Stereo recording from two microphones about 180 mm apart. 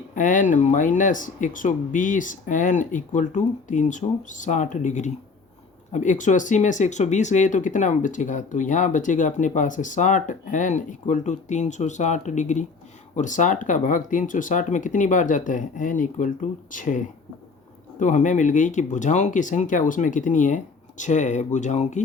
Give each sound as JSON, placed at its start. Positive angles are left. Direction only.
{"t": 0.1, "sound": "speech", "side_deg": 45}
{"t": 18.0, "sound": "speech", "side_deg": 45}